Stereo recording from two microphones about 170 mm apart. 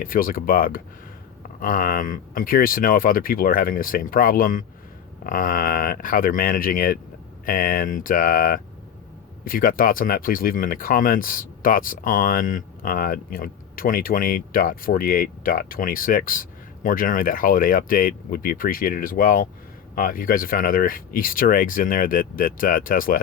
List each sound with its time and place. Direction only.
0.0 s speech: 55° left (ahead or behind)